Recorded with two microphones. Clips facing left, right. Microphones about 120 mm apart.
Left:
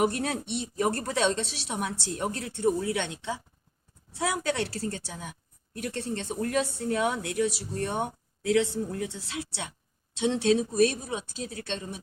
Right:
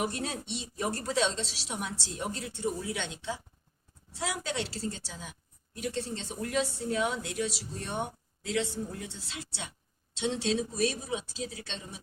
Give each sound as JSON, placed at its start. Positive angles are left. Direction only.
{"t": 0.0, "sound": "a woman's voice", "side_deg": 60}